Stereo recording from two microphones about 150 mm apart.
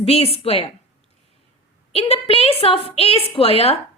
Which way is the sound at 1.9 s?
40° left (ahead or behind).